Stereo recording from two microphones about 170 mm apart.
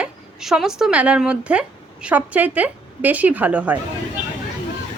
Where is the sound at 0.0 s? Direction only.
5° right (ahead or behind).